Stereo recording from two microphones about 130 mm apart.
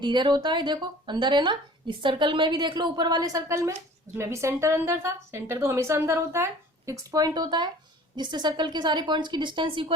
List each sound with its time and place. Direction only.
0.0 s speech: 35° right (ahead or behind)